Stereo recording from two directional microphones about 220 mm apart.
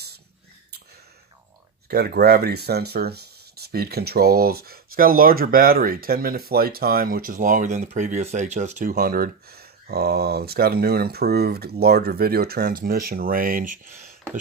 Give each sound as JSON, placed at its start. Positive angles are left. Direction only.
{"t": 1.9, "sound": "speech", "side_deg": -45}